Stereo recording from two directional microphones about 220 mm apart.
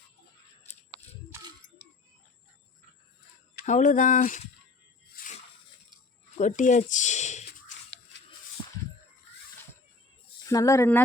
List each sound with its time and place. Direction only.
3.7 s speech: 35° left (ahead or behind)
5.1 s a sound: 35° left (ahead or behind)
10.4 s speech: 15° left (ahead or behind)